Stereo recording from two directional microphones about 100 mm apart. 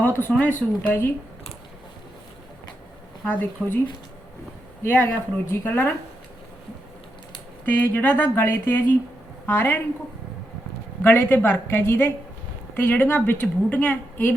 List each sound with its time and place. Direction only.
0.2 s speech: 20° left (ahead or behind)
3.2 s a woman's voice: 15° left (ahead or behind)
4.8 s speech: 20° left (ahead or behind)
7.6 s speech: 15° left (ahead or behind)
11.0 s a woman's voice: 20° left (ahead or behind)